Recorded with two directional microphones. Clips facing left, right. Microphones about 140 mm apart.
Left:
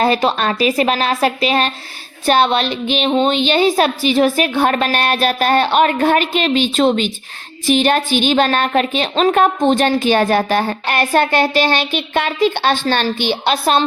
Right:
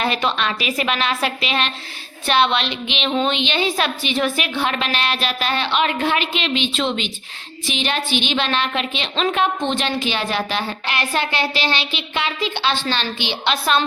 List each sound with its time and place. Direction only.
0.0 s a woman's voice: 35° left (ahead or behind)